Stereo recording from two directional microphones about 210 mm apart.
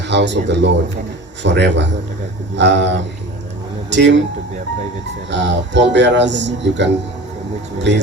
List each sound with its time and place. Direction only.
0.1 s speech: 55° right (ahead or behind)
3.8 s a sound: 55° right (ahead or behind)
5.3 s speech: 60° right (ahead or behind)